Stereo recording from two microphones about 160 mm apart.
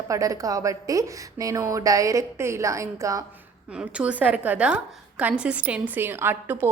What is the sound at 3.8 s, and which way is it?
A woman's voice, 5° right (ahead or behind).